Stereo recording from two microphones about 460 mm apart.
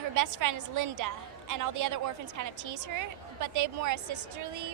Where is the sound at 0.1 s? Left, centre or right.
Right.